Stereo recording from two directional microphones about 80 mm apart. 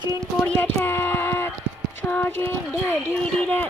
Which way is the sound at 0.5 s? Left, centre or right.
Left.